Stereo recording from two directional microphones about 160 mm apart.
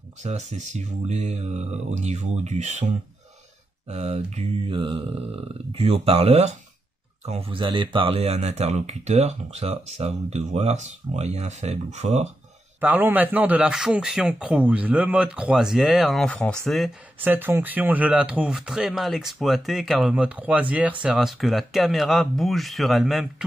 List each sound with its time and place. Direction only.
0.2 s speech: 45° right (ahead or behind)
3.8 s mantra: 45° right (ahead or behind)
7.2 s speech: 35° right (ahead or behind)
12.8 s a man's voice: 10° right (ahead or behind)
17.2 s speech: 10° right (ahead or behind)